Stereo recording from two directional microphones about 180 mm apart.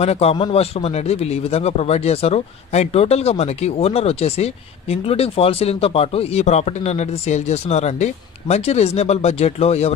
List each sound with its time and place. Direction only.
0.0 s speech: 35° left (ahead or behind)